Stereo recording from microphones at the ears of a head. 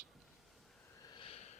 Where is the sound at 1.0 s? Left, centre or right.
Left.